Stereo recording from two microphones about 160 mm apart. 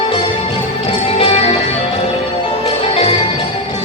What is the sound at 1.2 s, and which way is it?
Music, 35° left (ahead or behind).